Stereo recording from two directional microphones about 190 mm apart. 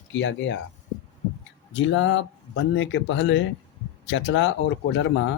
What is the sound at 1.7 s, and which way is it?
Speech, 80° left.